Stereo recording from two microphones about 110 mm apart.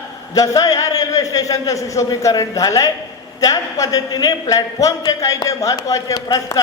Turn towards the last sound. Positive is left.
turn(degrees=30)  # may be behind; listen again after turning